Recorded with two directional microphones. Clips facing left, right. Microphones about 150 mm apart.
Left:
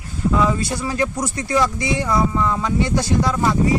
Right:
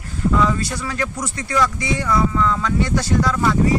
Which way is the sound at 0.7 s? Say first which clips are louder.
Left 3 dB; 25° left (ahead or behind).